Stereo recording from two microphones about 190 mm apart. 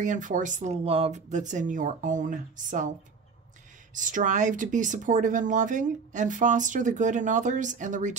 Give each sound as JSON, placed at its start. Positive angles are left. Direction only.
{"t": 0.0, "sound": "speech", "side_deg": -40}
{"t": 3.9, "sound": "speech", "side_deg": -45}